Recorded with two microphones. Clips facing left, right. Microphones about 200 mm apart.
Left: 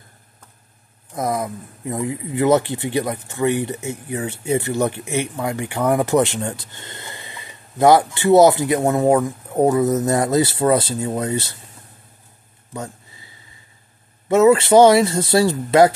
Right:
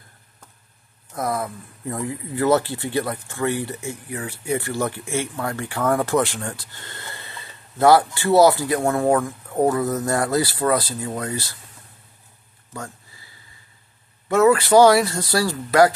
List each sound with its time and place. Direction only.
1.1 s speech: 20° left (ahead or behind)
12.7 s a sound: 20° left (ahead or behind)
14.3 s speech: 20° left (ahead or behind)